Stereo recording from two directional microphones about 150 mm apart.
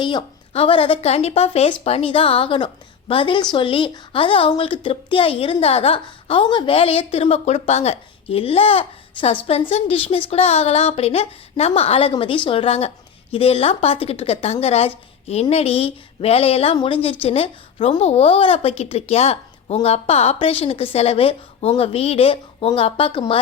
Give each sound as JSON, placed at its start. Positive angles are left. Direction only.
{"t": 0.0, "sound": "a woman's voice", "side_deg": 30}